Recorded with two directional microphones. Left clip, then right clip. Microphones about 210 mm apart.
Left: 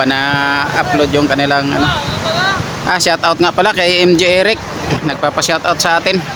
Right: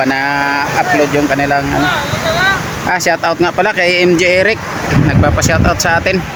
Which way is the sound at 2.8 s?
5° left (ahead or behind).